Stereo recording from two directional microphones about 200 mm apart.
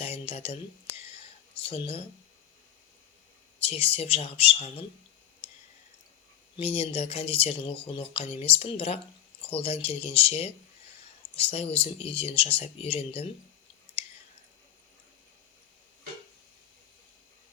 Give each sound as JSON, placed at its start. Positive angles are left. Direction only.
{"t": 0.0, "sound": "a sound", "side_deg": 30}
{"t": 3.6, "sound": "speech", "side_deg": 30}
{"t": 6.6, "sound": "speech", "side_deg": 30}